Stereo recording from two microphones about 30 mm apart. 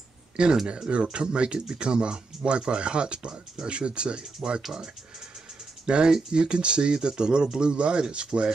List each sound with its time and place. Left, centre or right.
0.4 s speech: right
5.9 s speech: right